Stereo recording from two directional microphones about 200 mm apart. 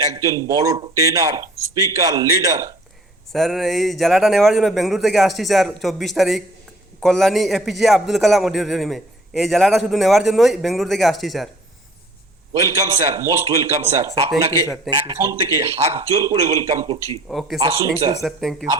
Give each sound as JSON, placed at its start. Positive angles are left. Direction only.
{"t": 0.0, "sound": "speech", "side_deg": -15}
{"t": 3.3, "sound": "a man's voice", "side_deg": 0}
{"t": 12.6, "sound": "speech", "side_deg": -15}
{"t": 17.2, "sound": "a man's voice", "side_deg": 0}